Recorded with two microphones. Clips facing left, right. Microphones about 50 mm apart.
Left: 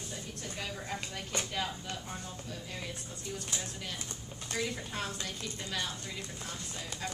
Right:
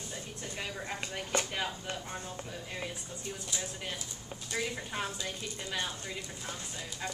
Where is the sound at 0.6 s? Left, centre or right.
Centre.